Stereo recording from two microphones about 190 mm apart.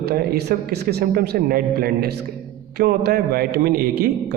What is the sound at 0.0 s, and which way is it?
A man's voice, 55° right (ahead or behind).